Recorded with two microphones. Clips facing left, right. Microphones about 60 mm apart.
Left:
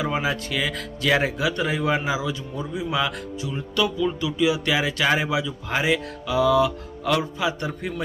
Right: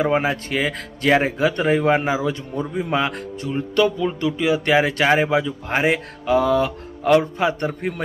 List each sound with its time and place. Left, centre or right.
0.0 s speech: right